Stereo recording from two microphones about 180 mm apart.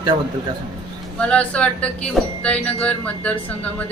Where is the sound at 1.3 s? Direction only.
5° left (ahead or behind).